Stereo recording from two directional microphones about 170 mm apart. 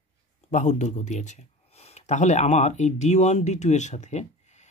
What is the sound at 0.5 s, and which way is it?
Speech, 45° left (ahead or behind).